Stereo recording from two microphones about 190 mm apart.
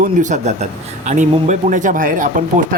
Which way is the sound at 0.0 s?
40° right (ahead or behind).